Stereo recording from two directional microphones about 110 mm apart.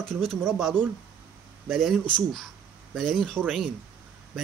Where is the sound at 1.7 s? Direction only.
Centre (ahead or behind).